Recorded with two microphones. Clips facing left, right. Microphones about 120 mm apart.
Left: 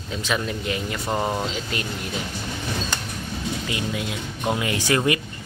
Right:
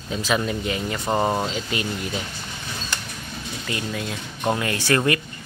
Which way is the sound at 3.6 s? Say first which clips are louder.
Left 1 dB; 15° left (ahead or behind).